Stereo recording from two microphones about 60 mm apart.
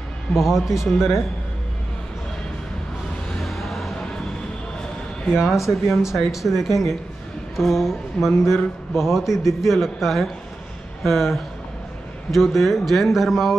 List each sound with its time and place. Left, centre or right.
0.3 s speech: centre
3.3 s music: centre
5.3 s speech: centre